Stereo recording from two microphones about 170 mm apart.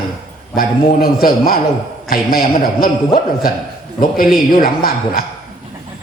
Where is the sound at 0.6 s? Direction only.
60° left (ahead or behind).